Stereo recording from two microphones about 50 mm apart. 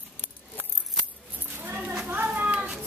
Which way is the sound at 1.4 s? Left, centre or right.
Right.